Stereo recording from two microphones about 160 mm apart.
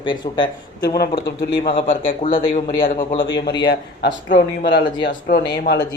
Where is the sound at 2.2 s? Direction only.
55° left (ahead or behind).